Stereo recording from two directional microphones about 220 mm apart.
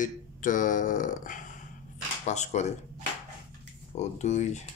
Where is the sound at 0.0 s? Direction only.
35° left (ahead or behind).